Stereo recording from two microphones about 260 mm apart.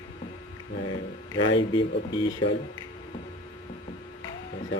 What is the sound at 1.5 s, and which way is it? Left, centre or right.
Speech, centre.